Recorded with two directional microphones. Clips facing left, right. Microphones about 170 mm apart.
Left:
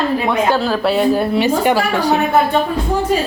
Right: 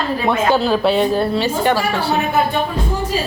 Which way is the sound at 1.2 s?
15° left (ahead or behind).